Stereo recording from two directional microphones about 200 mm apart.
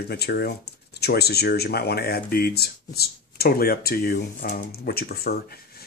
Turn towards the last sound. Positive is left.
turn(degrees=50)  # may be behind; listen again after turning